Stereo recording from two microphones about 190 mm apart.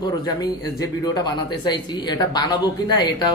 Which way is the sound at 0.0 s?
20° left (ahead or behind).